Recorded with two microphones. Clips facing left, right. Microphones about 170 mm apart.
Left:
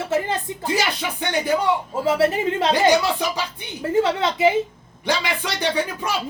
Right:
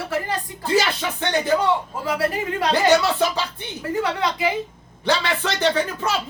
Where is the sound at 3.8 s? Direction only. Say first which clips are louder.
Left 4 dB; 25° left (ahead or behind).